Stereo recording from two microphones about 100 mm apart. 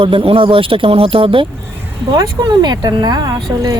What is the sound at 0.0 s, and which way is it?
Speech, 70° right (ahead or behind).